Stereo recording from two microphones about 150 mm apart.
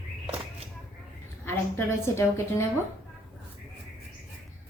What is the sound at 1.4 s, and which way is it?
A woman's voice, 15° left (ahead or behind).